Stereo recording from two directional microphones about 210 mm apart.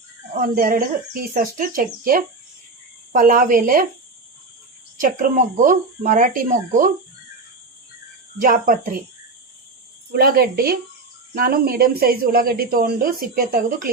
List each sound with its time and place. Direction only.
0.3 s speech: 40° right (ahead or behind)
4.9 s speech: 40° right (ahead or behind)
8.4 s speech: 40° right (ahead or behind)
10.1 s speech: 45° right (ahead or behind)